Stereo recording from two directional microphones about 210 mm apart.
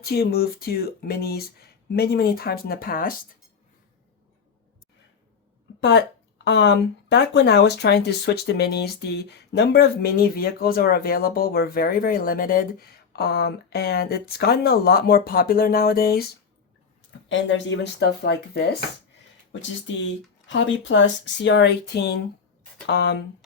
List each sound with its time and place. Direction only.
0.0 s speech: 50° left (ahead or behind)
6.4 s speech: 55° left (ahead or behind)
17.2 s speech: 60° left (ahead or behind)
20.5 s speech: 60° left (ahead or behind)